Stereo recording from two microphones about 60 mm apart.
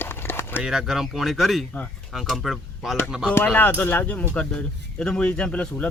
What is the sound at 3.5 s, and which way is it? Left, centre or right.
Speech, left.